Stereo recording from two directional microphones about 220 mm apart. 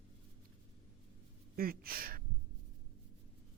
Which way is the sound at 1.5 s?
40° right (ahead or behind).